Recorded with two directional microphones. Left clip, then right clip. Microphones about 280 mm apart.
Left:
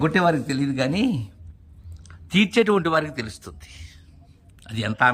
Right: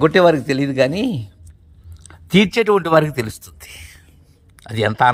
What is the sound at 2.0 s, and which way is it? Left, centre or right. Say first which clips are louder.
Speech: right 6 dB; centre.